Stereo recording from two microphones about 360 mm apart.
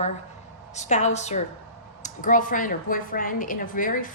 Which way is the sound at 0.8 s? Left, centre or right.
Centre.